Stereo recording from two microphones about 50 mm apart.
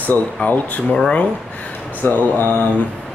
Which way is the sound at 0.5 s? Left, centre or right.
Left.